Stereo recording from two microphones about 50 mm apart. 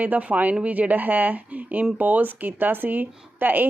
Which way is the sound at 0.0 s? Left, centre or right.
Right.